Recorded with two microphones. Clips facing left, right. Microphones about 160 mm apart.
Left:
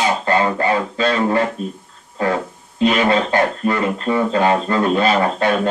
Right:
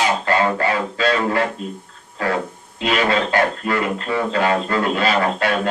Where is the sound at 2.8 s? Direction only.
25° left (ahead or behind).